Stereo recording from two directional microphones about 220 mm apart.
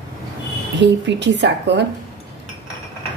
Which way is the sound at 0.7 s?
55° right (ahead or behind).